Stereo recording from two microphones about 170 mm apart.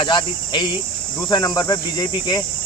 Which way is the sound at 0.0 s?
25° left (ahead or behind).